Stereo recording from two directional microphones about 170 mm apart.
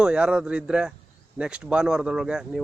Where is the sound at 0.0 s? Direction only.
5° right (ahead or behind).